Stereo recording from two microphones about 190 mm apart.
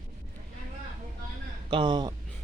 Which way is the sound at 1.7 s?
25° right (ahead or behind).